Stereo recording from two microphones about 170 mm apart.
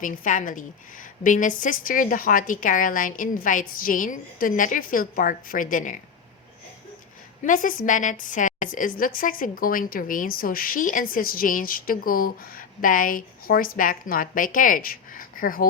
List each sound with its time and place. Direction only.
0.0 s a woman's voice: 50° left (ahead or behind)
7.4 s a woman's voice: 50° left (ahead or behind)